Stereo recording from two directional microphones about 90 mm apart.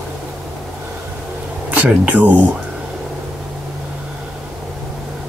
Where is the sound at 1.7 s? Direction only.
15° right (ahead or behind).